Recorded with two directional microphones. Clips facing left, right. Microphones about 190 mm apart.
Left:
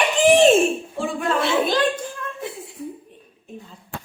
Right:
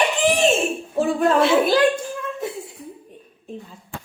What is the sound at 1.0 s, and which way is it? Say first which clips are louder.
Speech: right 8 dB; 40° right (ahead or behind).